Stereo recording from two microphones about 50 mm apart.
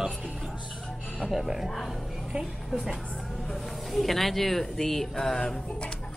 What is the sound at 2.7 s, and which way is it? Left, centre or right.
A woman's voice, centre.